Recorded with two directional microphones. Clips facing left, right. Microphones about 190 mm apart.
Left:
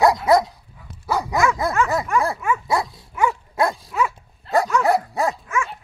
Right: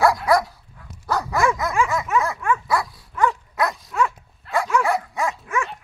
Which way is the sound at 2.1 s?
5° right (ahead or behind).